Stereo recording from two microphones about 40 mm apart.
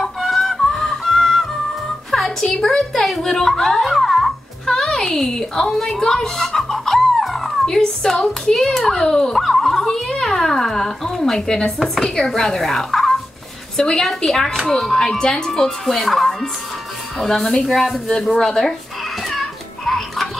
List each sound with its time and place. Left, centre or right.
0.2 s chicken: centre
0.6 s music: centre
2.6 s a sound: centre
7.6 s speech: centre
9.4 s dog: centre
10.0 s speech: centre
19.3 s music: centre